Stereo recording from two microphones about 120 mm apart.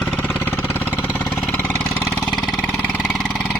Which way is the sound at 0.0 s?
10° left (ahead or behind).